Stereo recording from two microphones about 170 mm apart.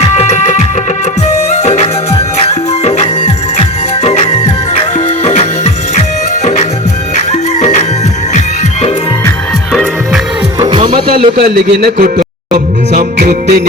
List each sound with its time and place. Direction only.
0.0 s music: 40° left (ahead or behind)
10.6 s music: 30° right (ahead or behind)
11.3 s a man's voice: 80° right; by 12.2 s 60° right (ahead or behind)
12.9 s music: 50° right (ahead or behind)